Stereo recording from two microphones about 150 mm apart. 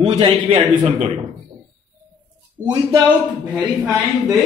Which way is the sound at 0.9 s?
55° right (ahead or behind).